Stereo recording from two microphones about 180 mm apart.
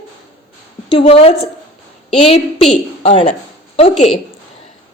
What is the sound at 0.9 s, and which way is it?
A woman's voice, 30° left (ahead or behind).